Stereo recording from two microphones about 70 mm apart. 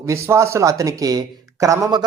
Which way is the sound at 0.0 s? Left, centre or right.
Right.